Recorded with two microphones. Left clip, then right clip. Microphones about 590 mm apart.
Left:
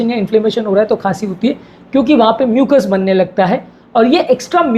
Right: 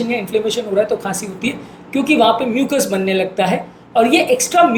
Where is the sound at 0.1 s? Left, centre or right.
Left.